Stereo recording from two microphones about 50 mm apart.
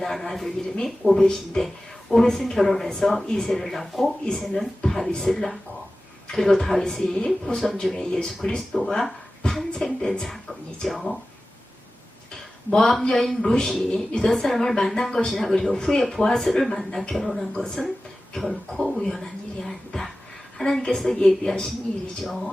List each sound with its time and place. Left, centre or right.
0.0 s speech: centre
12.7 s speech: centre
14.1 s a woman's voice: centre
14.3 s speech: centre
22.2 s speech: centre